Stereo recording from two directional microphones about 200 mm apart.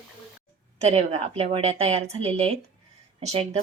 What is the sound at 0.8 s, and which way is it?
Speech, 30° right (ahead or behind).